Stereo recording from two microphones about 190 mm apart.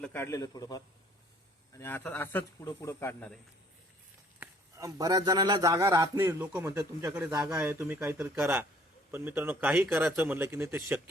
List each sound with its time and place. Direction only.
0.0 s speech: 10° left (ahead or behind)
1.8 s speech: 10° left (ahead or behind)
4.4 s a man's voice: 20° right (ahead or behind)